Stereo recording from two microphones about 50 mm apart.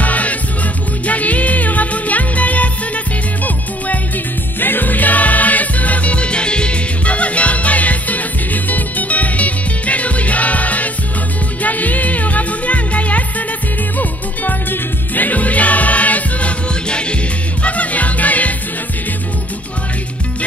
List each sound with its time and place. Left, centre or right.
0.0 s music: left
4.6 s music: left